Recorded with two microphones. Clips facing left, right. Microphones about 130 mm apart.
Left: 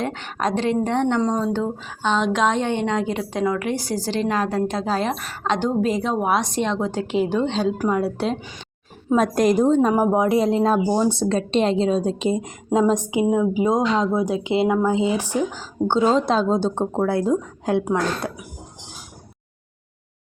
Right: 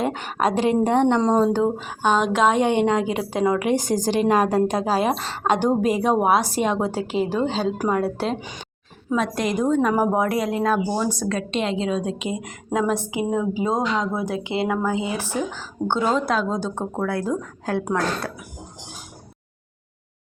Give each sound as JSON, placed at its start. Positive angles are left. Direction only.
{"t": 0.0, "sound": "a woman's voice", "side_deg": -10}
{"t": 1.2, "sound": "a woman's voice", "side_deg": -20}
{"t": 5.1, "sound": "speech", "side_deg": -30}
{"t": 5.4, "sound": "a woman's voice", "side_deg": -10}
{"t": 8.4, "sound": "a woman's voice", "side_deg": -15}
{"t": 9.1, "sound": "a woman's voice", "side_deg": 45}
{"t": 9.6, "sound": "a woman's voice", "side_deg": 25}
{"t": 12.5, "sound": "a woman's voice", "side_deg": 20}
{"t": 16.0, "sound": "a woman's voice", "side_deg": 25}